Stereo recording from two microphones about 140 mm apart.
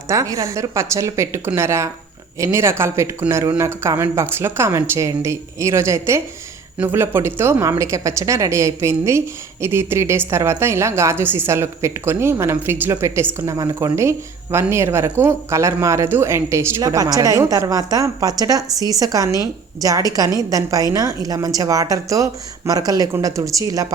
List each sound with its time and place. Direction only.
0.1 s a woman's voice: 25° right (ahead or behind)